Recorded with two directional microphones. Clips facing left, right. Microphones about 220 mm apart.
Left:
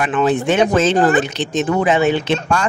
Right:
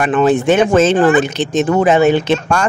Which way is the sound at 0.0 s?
45° right (ahead or behind).